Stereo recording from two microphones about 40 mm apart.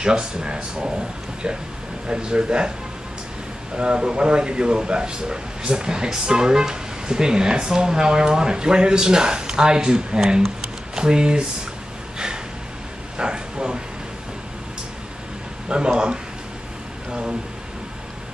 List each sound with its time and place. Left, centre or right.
0.0 s speech: centre
2.0 s speech: right
3.7 s speech: right
13.2 s a sound: right
15.7 s speech: right
17.1 s a sound: right